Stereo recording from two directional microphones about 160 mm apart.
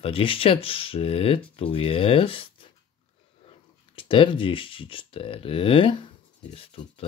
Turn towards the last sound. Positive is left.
turn(degrees=40)  # may be behind; listen again after turning